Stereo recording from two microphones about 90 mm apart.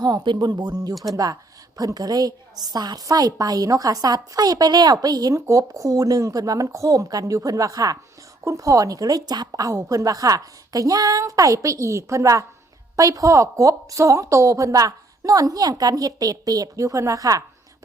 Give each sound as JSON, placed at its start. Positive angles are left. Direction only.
{"t": 0.0, "sound": "a woman's voice", "side_deg": -50}